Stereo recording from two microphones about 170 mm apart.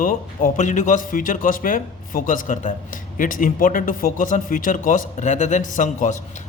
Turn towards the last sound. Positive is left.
turn(degrees=50)  # may be behind; listen again after turning